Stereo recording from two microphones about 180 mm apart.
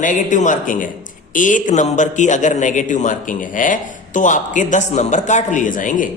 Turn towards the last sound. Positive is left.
turn(degrees=45)  # may be behind; listen again after turning